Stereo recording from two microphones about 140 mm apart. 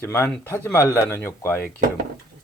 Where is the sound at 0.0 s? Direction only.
15° left (ahead or behind).